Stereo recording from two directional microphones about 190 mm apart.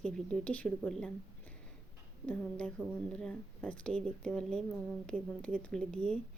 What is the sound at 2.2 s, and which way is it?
A woman's voice, 5° left (ahead or behind).